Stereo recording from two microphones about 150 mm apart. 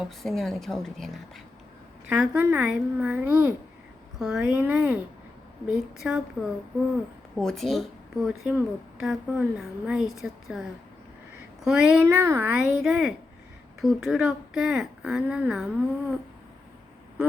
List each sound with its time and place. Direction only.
0.0 s a woman's voice: centre (ahead or behind)
7.3 s a woman's voice: centre (ahead or behind)
11.6 s speech: 5° right (ahead or behind)
12.0 s speech: 15° right (ahead or behind)
12.5 s a woman's voice: 5° right (ahead or behind)